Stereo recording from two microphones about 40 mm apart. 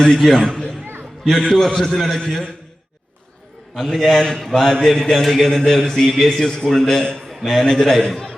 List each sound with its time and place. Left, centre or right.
0.0 s a man's voice: centre
3.8 s a man's voice: centre